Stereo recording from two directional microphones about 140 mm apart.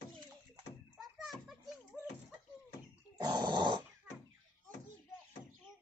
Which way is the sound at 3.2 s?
30° right (ahead or behind).